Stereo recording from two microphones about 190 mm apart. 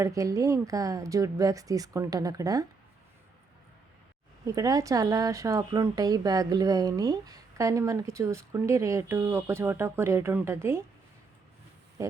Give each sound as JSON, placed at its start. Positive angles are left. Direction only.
{"t": 0.0, "sound": "speech", "side_deg": -15}
{"t": 4.4, "sound": "speech", "side_deg": -20}
{"t": 12.0, "sound": "pig", "side_deg": -15}